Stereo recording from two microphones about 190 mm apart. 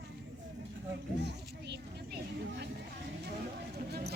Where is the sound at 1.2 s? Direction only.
65° right (ahead or behind).